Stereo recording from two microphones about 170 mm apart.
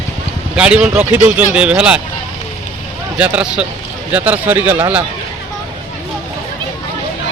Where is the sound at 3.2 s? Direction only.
5° right (ahead or behind).